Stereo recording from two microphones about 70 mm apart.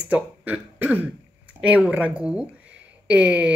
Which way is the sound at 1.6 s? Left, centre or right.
Centre.